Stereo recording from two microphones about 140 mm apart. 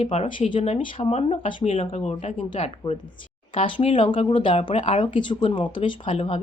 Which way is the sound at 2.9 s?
40° left (ahead or behind).